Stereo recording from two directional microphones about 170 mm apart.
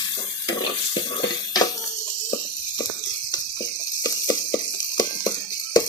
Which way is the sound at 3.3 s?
20° left (ahead or behind).